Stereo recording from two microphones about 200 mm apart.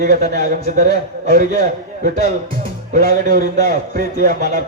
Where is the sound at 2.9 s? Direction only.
45° right (ahead or behind).